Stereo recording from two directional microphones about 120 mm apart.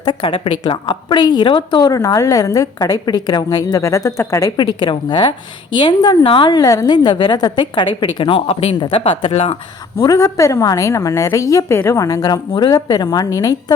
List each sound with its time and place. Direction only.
0.0 s speech: 40° left (ahead or behind)
6.6 s speech: 30° left (ahead or behind); by 9.6 s 60° left (ahead or behind)
10.0 s a woman's voice: 30° left (ahead or behind)